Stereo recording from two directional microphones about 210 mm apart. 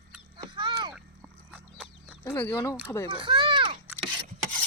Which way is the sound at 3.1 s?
25° right (ahead or behind).